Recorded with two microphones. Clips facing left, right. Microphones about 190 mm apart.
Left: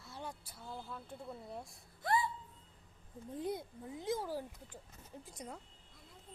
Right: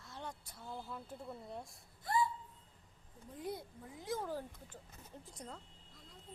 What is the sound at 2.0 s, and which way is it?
Gasp, 70° left (ahead or behind).